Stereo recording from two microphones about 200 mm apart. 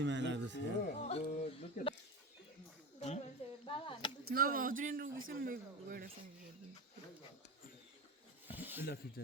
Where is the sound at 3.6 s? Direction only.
25° left (ahead or behind).